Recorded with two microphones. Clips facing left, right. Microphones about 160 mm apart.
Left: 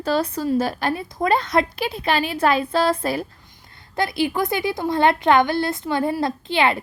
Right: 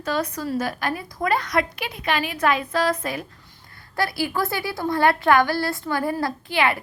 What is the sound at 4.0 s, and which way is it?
A woman's voice, 20° left (ahead or behind).